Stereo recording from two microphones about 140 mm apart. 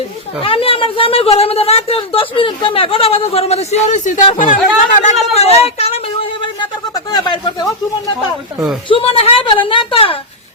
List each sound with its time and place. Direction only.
0.4 s a woman's voice: 40° left (ahead or behind); by 5.1 s 65° left (ahead or behind)
5.3 s a woman's voice: 45° left (ahead or behind)
6.4 s a sound: 30° left (ahead or behind)
8.9 s a woman's voice: 40° left (ahead or behind)